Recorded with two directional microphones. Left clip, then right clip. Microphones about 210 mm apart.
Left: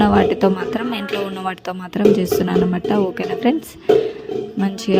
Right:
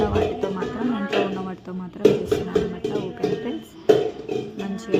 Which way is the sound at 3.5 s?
40° left (ahead or behind).